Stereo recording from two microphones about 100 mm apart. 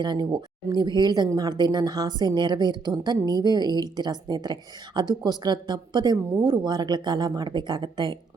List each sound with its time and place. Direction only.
0.0 s a woman's voice: 45° right (ahead or behind)